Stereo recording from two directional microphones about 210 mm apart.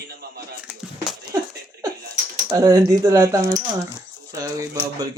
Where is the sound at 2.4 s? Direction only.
15° right (ahead or behind).